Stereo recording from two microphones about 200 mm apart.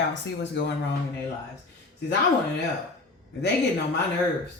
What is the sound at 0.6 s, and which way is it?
Speech, 65° left (ahead or behind).